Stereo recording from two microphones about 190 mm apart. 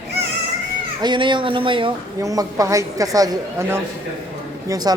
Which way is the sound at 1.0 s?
25° right (ahead or behind).